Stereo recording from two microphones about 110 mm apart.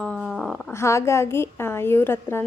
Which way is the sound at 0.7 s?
25° left (ahead or behind).